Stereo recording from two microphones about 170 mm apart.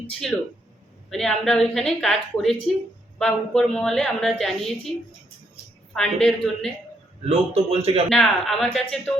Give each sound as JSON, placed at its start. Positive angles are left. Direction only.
{"t": 0.1, "sound": "a woman's voice", "side_deg": 5}
{"t": 7.3, "sound": "a man's voice", "side_deg": -35}
{"t": 8.1, "sound": "a woman's voice", "side_deg": 0}